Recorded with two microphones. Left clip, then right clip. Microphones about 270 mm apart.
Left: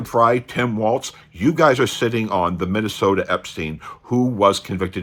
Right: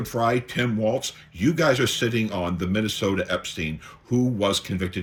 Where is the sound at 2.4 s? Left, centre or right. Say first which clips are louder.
Left 5 dB; left.